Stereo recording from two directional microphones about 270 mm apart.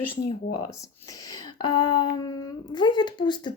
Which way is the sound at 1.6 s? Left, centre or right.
Left.